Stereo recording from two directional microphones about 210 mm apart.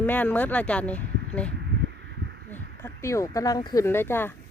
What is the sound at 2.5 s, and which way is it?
Speech, 15° left (ahead or behind).